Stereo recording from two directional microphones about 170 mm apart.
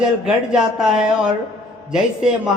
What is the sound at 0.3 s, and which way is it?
A man's voice, 5° right (ahead or behind).